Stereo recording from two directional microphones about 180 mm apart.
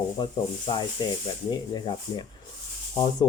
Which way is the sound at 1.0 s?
25° left (ahead or behind).